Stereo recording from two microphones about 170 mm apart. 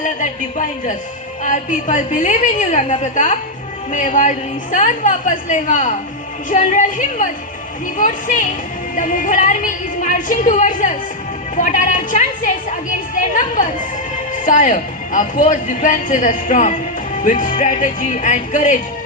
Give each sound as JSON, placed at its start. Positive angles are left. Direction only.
{"t": 0.0, "sound": "a woman's voice", "side_deg": 50}